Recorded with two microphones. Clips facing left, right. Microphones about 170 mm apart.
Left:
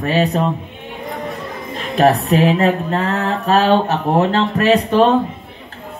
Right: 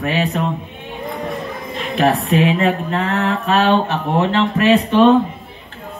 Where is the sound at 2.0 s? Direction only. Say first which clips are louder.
Left 2 dB; 40° left (ahead or behind).